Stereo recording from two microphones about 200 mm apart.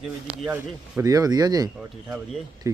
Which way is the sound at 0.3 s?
5° right (ahead or behind).